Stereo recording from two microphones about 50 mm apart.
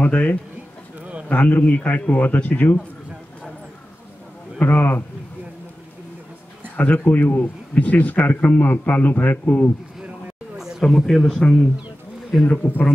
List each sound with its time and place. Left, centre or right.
0.0 s a man's voice: left
4.6 s a man's voice: left
6.8 s a man's voice: left
10.8 s speech: centre
12.4 s a man's voice: left